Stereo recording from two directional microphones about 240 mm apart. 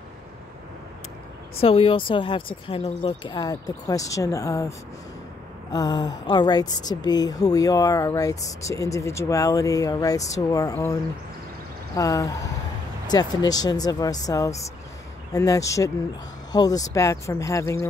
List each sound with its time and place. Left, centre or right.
1.6 s speech: left
5.7 s speech: centre
11.9 s speech: centre